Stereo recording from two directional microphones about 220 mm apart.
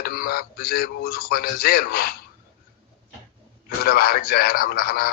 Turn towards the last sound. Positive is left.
turn(degrees=45)  # may be behind; listen again after turning